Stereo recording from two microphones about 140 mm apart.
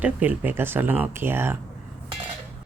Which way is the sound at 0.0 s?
10° right (ahead or behind).